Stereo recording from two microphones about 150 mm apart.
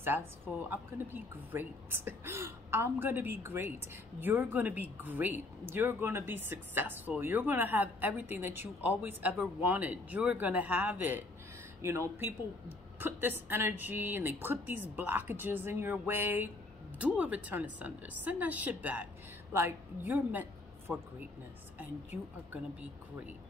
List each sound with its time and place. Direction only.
0.7 s a woman's voice: 15° right (ahead or behind)